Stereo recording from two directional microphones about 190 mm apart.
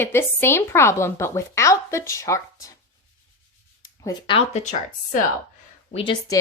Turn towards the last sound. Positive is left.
turn(degrees=25)  # may be behind; listen again after turning